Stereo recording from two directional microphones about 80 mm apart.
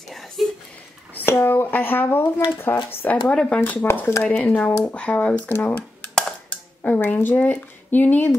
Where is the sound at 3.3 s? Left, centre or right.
Centre.